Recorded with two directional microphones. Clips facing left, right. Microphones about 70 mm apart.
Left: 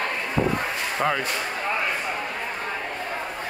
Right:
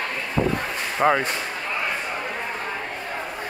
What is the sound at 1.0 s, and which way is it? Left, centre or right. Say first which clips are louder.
Speech: right 6 dB; right.